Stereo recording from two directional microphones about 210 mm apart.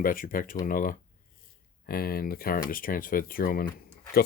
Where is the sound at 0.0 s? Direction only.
40° left (ahead or behind).